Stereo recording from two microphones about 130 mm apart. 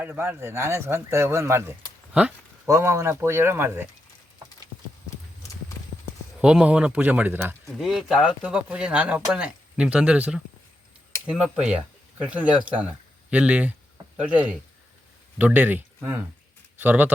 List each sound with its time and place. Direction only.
0.0 s a man's voice: 15° right (ahead or behind)
6.4 s speech: 10° right (ahead or behind)
7.7 s speech: centre (ahead or behind)